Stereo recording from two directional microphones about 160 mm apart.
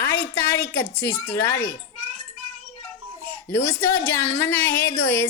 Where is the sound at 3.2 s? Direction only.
10° left (ahead or behind).